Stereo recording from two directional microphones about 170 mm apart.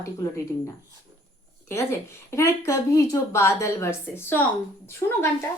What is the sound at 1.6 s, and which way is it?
A woman's voice, 15° left (ahead or behind).